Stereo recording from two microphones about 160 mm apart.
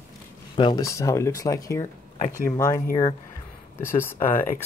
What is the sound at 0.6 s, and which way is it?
Speech, 25° left (ahead or behind).